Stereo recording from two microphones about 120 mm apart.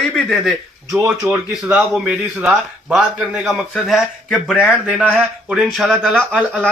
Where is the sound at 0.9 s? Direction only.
15° right (ahead or behind).